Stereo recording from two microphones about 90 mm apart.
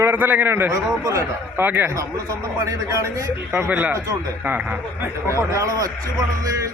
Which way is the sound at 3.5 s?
15° right (ahead or behind).